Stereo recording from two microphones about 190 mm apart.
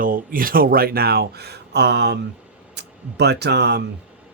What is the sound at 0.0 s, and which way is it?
Speech, 45° right (ahead or behind).